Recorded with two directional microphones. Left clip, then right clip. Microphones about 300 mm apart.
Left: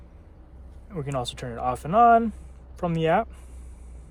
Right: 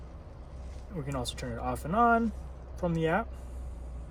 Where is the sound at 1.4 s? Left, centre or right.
Left.